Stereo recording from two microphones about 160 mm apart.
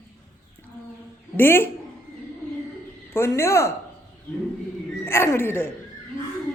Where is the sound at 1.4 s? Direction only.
15° left (ahead or behind).